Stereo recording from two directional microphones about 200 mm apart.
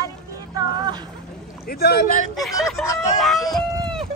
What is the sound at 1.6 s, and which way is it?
Speech, 50° left (ahead or behind).